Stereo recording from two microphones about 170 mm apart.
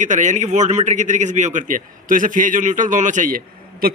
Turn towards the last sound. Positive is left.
turn(degrees=-60)  # may be behind; listen again after turning